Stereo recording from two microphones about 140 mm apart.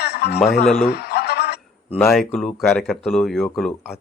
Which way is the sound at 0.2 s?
90° left.